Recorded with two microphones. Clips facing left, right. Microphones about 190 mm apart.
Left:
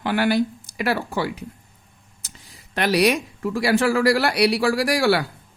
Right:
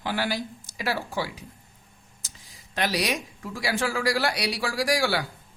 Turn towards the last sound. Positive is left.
turn(degrees=65)  # may be behind; listen again after turning